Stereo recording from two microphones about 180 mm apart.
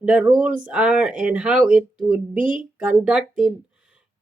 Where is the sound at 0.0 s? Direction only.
5° right (ahead or behind).